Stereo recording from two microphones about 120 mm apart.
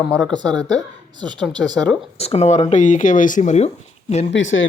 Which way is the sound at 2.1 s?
60° left (ahead or behind).